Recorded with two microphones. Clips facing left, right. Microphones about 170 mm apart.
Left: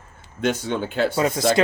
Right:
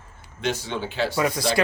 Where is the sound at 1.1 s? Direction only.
25° left (ahead or behind).